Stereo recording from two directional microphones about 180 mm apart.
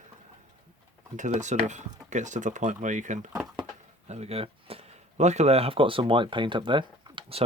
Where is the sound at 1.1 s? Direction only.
40° right (ahead or behind).